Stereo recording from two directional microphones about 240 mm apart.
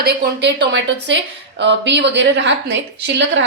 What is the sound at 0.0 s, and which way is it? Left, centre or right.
Speech, right.